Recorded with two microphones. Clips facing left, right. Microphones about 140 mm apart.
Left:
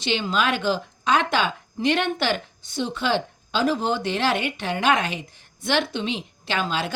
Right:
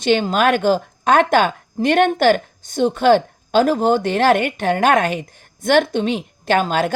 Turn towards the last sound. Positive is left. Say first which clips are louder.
# right 9 dB
turn(degrees=-50)  # may be behind; listen again after turning